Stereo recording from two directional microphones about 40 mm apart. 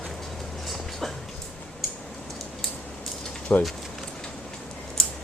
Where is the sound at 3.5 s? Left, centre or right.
Left.